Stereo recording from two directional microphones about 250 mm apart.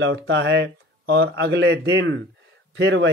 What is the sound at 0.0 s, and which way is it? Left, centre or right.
Speech, right.